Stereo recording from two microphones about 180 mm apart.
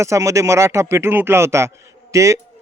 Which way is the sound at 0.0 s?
15° right (ahead or behind).